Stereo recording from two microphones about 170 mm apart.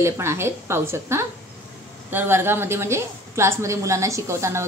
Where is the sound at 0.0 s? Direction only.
15° right (ahead or behind).